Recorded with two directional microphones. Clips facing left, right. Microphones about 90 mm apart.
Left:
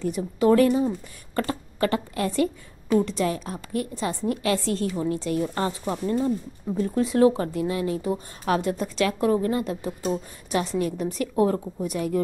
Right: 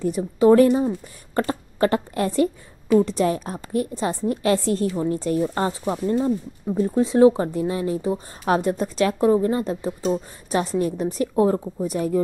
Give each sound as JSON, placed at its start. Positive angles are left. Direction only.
{"t": 0.0, "sound": "a woman's voice", "side_deg": -35}